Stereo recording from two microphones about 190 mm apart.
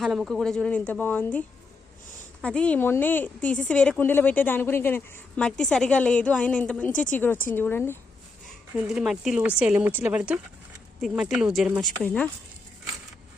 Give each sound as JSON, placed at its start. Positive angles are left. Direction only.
{"t": 0.0, "sound": "a woman's voice", "side_deg": 0}
{"t": 8.7, "sound": "speech", "side_deg": 0}